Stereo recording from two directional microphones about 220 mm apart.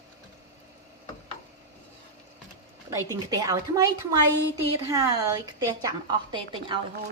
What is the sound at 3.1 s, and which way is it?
A woman's voice, 15° right (ahead or behind).